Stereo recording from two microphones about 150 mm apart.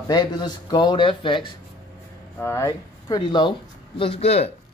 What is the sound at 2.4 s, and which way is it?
Speech, 20° left (ahead or behind).